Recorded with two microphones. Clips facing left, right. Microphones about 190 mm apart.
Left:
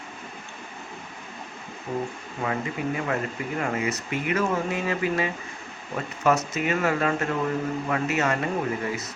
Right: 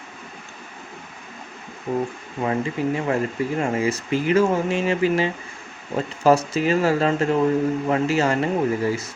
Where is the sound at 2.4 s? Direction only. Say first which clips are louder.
Right 5 dB; 30° right (ahead or behind).